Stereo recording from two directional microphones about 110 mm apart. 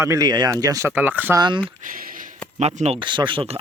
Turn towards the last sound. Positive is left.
turn(degrees=-50)  # may be behind; listen again after turning